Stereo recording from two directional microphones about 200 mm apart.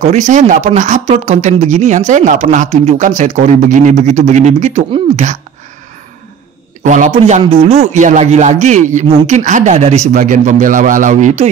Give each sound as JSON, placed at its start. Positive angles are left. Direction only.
{"t": 0.0, "sound": "speech", "side_deg": -35}
{"t": 6.8, "sound": "speech", "side_deg": -40}